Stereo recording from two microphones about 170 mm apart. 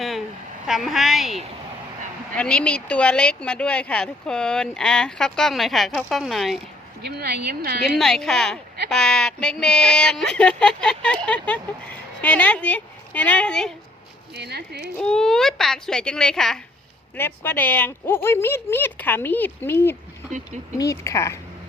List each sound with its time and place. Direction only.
0.7 s speech: centre (ahead or behind)
7.0 s speech: 70° right (ahead or behind)
7.9 s speech: centre (ahead or behind)
14.3 s speech: 75° right (ahead or behind)
14.9 s speech: 5° left (ahead or behind)
17.2 s speech: 15° left (ahead or behind)